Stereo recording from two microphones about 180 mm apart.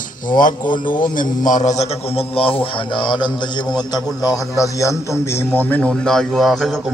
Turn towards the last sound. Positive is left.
turn(degrees=0)  # may be behind; listen again after turning